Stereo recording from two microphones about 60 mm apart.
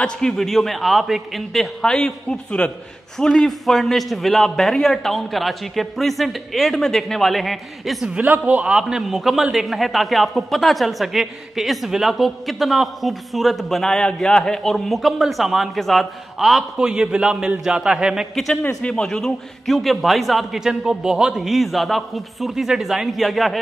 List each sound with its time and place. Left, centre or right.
0.0 s a man's voice: centre
8.1 s a man's voice: right
8.7 s a man's voice: centre
16.7 s a man's voice: centre
18.8 s a man's voice: centre
21.4 s a man's voice: centre